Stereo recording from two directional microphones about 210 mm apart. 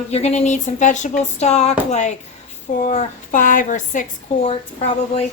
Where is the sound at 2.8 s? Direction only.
35° left (ahead or behind).